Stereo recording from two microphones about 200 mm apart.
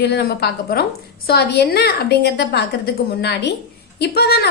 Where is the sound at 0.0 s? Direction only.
55° left (ahead or behind).